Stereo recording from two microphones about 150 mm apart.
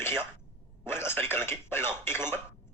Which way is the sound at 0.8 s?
15° left (ahead or behind).